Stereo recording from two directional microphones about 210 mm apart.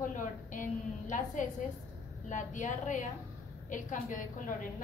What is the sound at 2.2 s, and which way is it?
A woman's voice, 35° left (ahead or behind).